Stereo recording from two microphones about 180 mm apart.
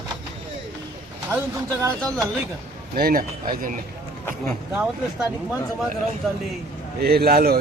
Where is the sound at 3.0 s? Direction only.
55° right (ahead or behind).